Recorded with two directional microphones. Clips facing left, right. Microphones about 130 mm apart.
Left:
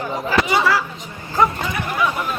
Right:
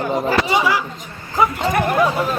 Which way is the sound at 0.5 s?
15° right (ahead or behind).